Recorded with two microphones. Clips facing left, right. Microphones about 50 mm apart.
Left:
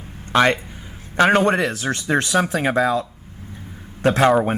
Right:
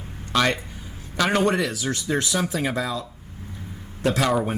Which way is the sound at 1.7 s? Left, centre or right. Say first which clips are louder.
Left 4 dB; left.